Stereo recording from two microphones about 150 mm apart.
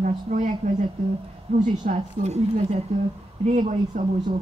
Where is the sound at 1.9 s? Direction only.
60° right (ahead or behind).